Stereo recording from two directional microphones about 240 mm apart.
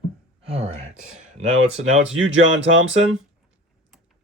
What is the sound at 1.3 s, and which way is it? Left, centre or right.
Speech, right.